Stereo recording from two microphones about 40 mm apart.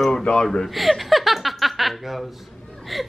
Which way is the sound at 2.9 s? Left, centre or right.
Centre.